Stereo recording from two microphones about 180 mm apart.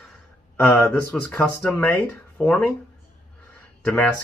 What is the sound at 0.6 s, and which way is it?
Speech, 10° left (ahead or behind).